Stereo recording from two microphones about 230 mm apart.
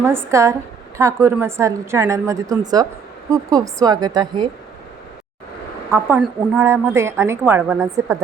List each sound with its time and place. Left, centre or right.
0.0 s a woman's voice: centre
5.9 s a woman's voice: centre